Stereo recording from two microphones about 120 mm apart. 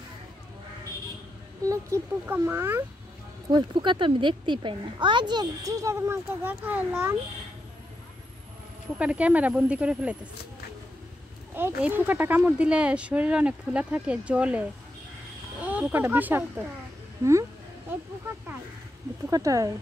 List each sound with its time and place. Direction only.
1.7 s speech: 20° right (ahead or behind)
3.4 s a woman's voice: 40° right (ahead or behind); by 7.2 s 15° right (ahead or behind)
8.9 s speech: 10° right (ahead or behind)
11.5 s speech: 15° right (ahead or behind)
17.2 s speech: 25° right (ahead or behind)
19.2 s speech: 25° right (ahead or behind)